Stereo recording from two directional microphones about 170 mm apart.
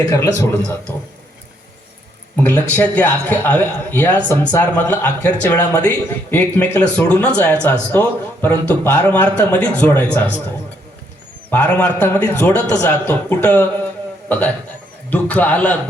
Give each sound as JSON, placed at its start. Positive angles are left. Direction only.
{"t": 0.1, "sound": "a man's voice", "side_deg": 15}
{"t": 2.3, "sound": "a man's voice", "side_deg": 10}
{"t": 11.5, "sound": "a man's voice", "side_deg": 10}